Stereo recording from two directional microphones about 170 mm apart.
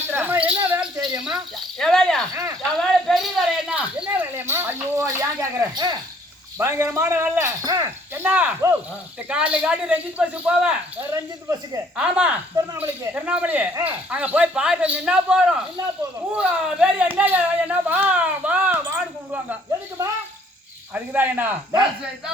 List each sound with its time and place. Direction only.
0.1 s a sound: 10° right (ahead or behind)
1.2 s speech: centre (ahead or behind)
2.3 s speech: 20° right (ahead or behind)
2.7 s a sound: centre (ahead or behind); by 6.0 s 25° right (ahead or behind)
6.6 s speech: 15° right (ahead or behind)
11.1 s speech: 20° right (ahead or behind)
11.9 s speech: 5° right (ahead or behind)
20.9 s speech: 10° right (ahead or behind)